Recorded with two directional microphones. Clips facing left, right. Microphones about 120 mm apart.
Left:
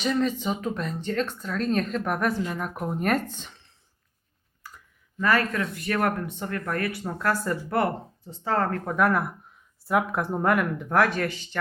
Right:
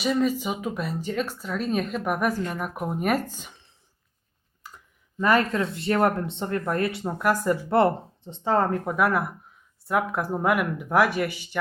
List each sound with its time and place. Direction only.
0.0 s speech: 10° right (ahead or behind)
4.6 s a sound: 20° right (ahead or behind)
5.2 s speech: 20° right (ahead or behind)
7.7 s speech: 25° right (ahead or behind); by 11.5 s 10° right (ahead or behind)